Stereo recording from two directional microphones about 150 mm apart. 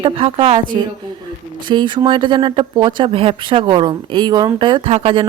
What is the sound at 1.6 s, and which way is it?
A woman's voice, 30° right (ahead or behind).